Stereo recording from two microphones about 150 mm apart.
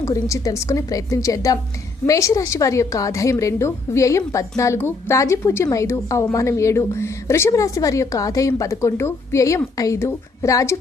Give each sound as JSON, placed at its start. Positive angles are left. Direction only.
{"t": 0.0, "sound": "a woman's voice", "side_deg": 20}